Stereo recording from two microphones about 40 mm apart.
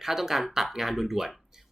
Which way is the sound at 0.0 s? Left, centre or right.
Centre.